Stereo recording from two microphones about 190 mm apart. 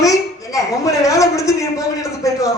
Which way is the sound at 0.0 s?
15° left (ahead or behind).